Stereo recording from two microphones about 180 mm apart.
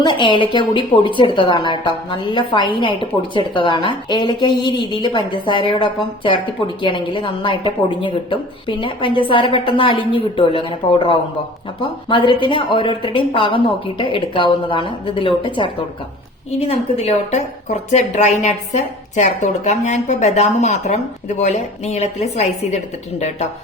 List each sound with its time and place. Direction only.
0.0 s a woman's voice: 25° left (ahead or behind)